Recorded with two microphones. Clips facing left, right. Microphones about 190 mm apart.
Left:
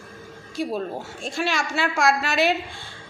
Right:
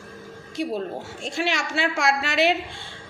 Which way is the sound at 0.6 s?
20° right (ahead or behind).